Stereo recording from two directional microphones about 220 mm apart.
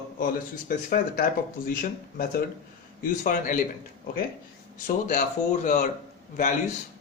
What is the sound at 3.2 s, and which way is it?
Speech, 35° left (ahead or behind).